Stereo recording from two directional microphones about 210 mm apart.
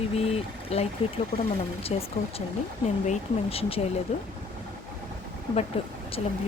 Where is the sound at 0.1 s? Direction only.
30° left (ahead or behind).